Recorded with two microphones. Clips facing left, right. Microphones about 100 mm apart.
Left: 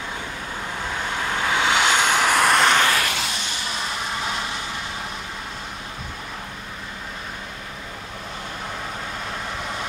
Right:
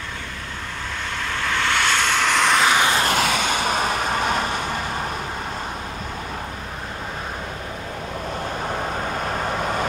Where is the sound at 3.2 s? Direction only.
65° right (ahead or behind).